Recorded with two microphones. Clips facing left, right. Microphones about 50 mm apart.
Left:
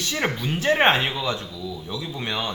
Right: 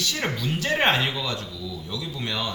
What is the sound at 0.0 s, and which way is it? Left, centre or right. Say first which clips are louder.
A man's voice: left 2 dB; left.